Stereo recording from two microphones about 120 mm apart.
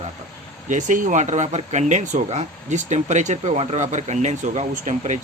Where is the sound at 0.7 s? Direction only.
90° right.